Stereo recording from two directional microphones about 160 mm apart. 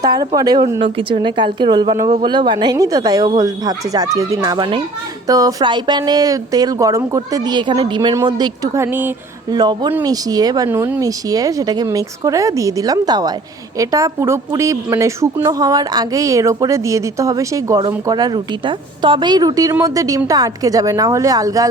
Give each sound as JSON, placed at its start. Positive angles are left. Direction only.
{"t": 0.0, "sound": "a woman's voice", "side_deg": -25}
{"t": 9.5, "sound": "a woman's voice", "side_deg": -25}
{"t": 10.7, "sound": "a woman's voice", "side_deg": -10}